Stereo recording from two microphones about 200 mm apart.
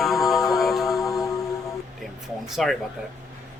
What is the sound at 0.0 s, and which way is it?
Mantra, centre (ahead or behind).